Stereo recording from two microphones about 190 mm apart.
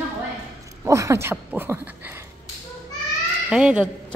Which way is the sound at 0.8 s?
15° right (ahead or behind).